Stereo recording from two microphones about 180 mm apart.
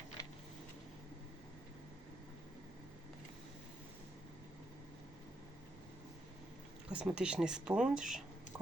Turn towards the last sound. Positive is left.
turn(degrees=-5)  # may be behind; listen again after turning